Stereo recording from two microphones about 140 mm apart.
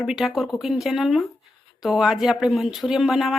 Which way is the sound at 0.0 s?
5° right (ahead or behind).